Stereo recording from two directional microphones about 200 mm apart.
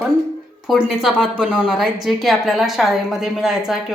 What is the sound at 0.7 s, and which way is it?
A woman's voice, centre (ahead or behind).